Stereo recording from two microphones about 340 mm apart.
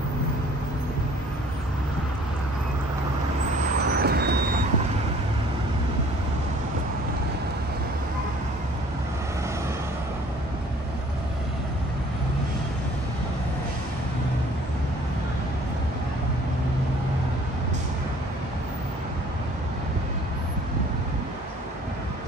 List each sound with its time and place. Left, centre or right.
4.0 s vehicle: right